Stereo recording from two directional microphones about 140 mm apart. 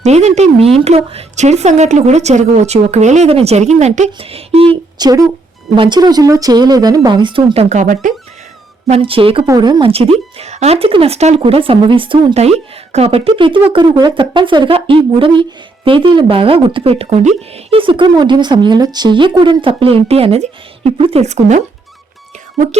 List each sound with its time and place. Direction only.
0.0 s a woman's voice: 50° right (ahead or behind)
4.9 s speech: 30° right (ahead or behind); by 8.1 s 60° right (ahead or behind)
8.9 s speech: 40° right (ahead or behind)
9.5 s speech: 30° right (ahead or behind)
9.9 s a woman's voice: 45° right (ahead or behind)